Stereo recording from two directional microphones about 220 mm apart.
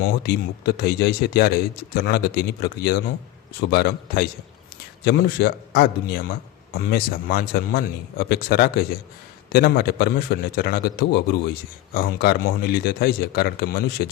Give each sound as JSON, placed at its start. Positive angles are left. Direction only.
{"t": 0.2, "sound": "a man's voice", "side_deg": 50}